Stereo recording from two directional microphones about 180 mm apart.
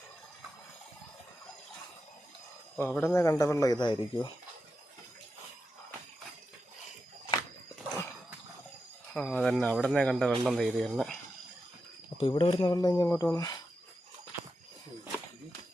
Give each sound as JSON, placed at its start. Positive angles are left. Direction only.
{"t": 2.7, "sound": "speech", "side_deg": 10}
{"t": 9.1, "sound": "speech", "side_deg": 5}
{"t": 12.1, "sound": "speech", "side_deg": 30}
{"t": 14.3, "sound": "a sound", "side_deg": -10}